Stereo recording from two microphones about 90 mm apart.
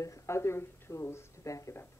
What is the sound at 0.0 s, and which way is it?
Speech, 35° left (ahead or behind).